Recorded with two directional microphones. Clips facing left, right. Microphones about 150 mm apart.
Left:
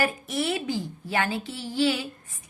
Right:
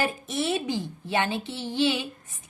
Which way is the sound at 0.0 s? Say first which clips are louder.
Left 1 dB; 25° right (ahead or behind).